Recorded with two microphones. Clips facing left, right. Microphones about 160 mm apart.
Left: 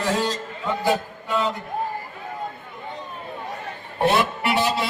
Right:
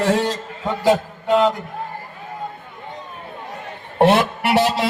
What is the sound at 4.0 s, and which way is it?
Music, 80° right.